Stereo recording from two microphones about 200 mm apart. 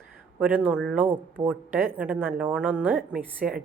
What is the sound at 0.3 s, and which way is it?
Speech, 10° right (ahead or behind).